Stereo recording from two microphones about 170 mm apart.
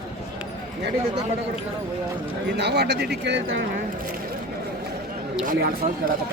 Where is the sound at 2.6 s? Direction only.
80° right.